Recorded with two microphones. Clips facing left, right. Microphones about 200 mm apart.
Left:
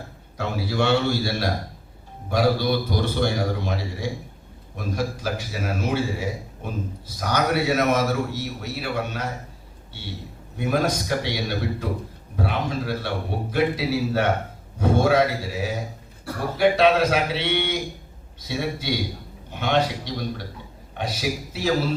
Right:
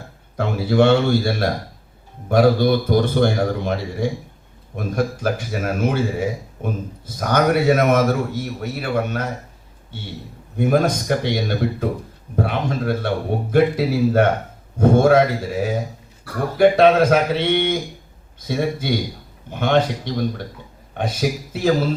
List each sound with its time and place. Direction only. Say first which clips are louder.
0.3 s a man's voice: right 8 dB; 50° right (ahead or behind)
10.6 s a man's voice: right 5 dB; 50° right (ahead or behind)